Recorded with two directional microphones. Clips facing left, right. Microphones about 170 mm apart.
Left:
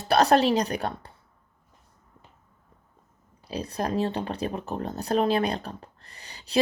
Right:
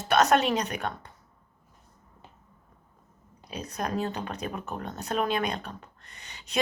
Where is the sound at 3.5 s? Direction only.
30° left (ahead or behind).